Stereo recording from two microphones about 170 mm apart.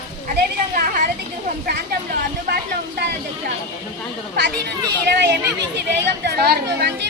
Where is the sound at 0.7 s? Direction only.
55° right (ahead or behind).